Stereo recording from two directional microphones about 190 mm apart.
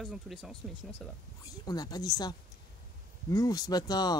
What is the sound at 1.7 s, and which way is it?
Speech, 20° left (ahead or behind).